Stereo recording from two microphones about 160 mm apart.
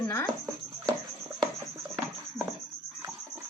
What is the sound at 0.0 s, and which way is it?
Music, 20° left (ahead or behind).